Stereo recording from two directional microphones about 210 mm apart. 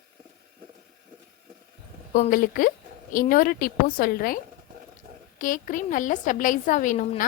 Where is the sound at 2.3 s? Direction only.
40° left (ahead or behind).